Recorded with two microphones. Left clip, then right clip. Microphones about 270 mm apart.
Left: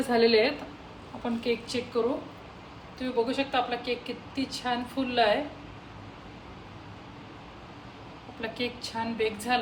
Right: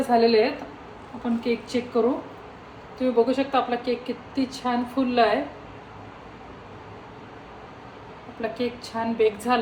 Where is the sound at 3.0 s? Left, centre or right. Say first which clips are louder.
Right 7 dB; centre.